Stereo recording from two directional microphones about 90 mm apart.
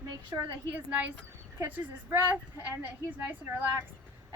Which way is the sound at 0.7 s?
15° right (ahead or behind).